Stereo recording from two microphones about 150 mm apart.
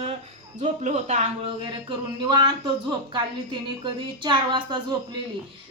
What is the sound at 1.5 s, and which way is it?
Speech, 35° right (ahead or behind).